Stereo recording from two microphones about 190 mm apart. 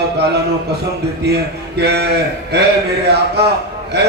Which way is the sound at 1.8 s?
60° right (ahead or behind).